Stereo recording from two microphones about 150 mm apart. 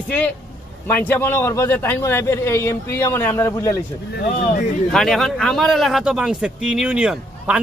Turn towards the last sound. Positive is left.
turn(degrees=-5)  # may be behind; listen again after turning